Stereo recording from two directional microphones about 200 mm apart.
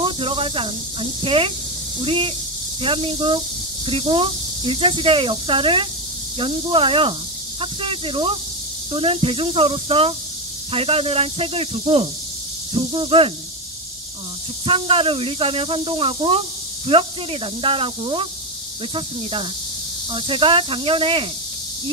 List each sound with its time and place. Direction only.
0.0 s snake: 25° right (ahead or behind)
1.2 s speech: 25° right (ahead or behind)
14.7 s speech: 25° right (ahead or behind)
20.1 s speech: 25° right (ahead or behind)